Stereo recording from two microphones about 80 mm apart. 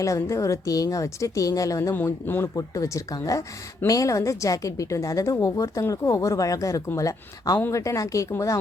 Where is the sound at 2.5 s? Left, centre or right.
Left.